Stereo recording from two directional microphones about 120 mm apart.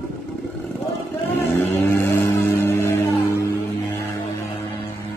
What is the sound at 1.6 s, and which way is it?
Music, 15° left (ahead or behind).